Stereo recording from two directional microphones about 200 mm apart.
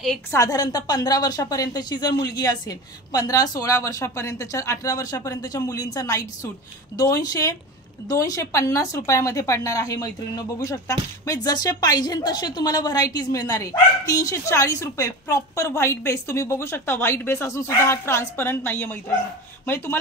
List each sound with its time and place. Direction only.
0.3 s speech: 15° left (ahead or behind)